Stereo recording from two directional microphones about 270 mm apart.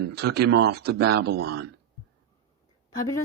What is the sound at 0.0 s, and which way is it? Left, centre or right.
Speech, right.